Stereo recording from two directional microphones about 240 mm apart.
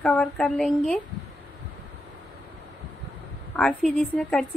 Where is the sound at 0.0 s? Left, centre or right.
Centre.